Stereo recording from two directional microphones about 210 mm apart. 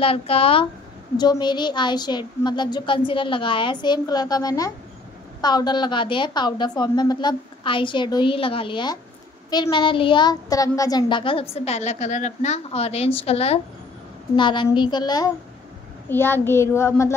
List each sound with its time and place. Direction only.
0.0 s a woman's voice: 25° left (ahead or behind)